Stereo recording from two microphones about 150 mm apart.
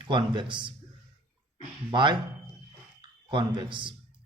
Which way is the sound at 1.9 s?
30° right (ahead or behind).